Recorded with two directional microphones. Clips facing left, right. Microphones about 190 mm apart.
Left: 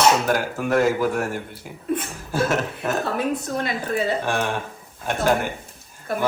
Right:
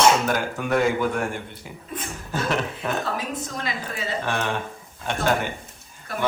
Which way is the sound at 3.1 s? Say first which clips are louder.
Left 6 dB; 60° left (ahead or behind).